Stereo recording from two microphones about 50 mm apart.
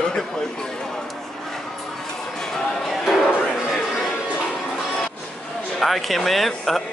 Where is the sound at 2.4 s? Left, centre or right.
Centre.